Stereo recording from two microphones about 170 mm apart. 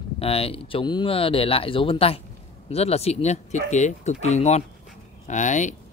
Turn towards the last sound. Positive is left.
turn(degrees=45)  # may be behind; listen again after turning